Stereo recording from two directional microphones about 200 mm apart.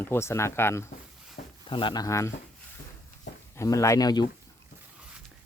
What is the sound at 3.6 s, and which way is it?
Speech, 15° left (ahead or behind).